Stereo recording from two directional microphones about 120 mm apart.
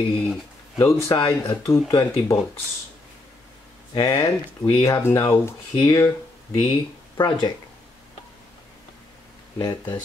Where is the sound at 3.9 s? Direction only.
25° left (ahead or behind).